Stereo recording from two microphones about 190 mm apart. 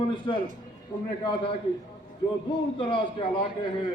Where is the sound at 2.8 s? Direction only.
25° left (ahead or behind).